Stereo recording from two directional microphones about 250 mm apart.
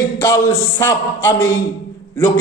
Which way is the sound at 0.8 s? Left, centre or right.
Centre.